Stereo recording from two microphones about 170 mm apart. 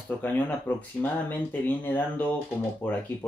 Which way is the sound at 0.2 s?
10° left (ahead or behind).